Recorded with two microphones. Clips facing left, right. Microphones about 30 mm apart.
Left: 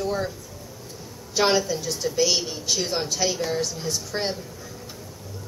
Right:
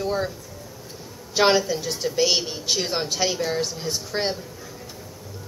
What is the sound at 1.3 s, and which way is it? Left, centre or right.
Speech, right.